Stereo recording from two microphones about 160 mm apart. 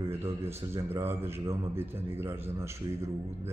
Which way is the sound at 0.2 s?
15° right (ahead or behind).